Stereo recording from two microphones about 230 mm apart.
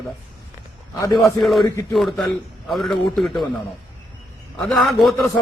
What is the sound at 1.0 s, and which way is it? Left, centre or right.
Speech, centre.